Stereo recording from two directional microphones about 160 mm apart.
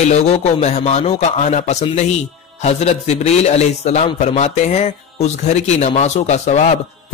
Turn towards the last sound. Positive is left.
turn(degrees=45)  # may be behind; listen again after turning